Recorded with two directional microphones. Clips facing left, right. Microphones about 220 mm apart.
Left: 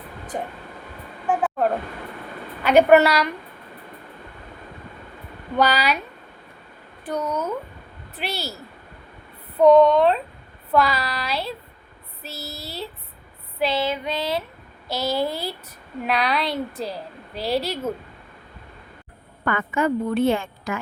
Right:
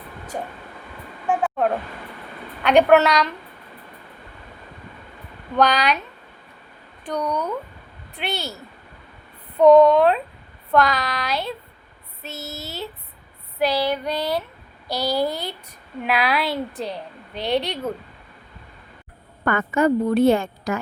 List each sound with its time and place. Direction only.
1.3 s a woman's voice: centre (ahead or behind)
5.5 s a woman's voice: 5° left (ahead or behind)
7.0 s a woman's voice: 5° left (ahead or behind)
9.6 s a woman's voice: centre (ahead or behind)
13.7 s speech: 25° left (ahead or behind)
13.9 s a woman's voice: centre (ahead or behind)
15.1 s speech: 25° left (ahead or behind)
16.0 s a woman's voice: 5° right (ahead or behind)
19.5 s a woman's voice: 45° right (ahead or behind)